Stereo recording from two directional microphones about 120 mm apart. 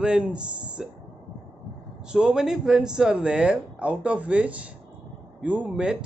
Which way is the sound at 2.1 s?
5° right (ahead or behind).